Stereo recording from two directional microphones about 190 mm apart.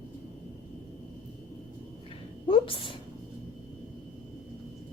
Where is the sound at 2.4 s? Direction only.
25° left (ahead or behind).